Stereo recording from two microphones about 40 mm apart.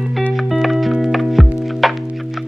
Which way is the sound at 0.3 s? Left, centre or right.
Centre.